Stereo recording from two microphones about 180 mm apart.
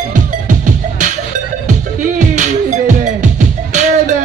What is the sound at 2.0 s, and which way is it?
Music, 45° right (ahead or behind).